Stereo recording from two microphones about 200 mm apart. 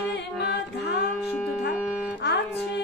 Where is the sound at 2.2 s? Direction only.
60° left (ahead or behind).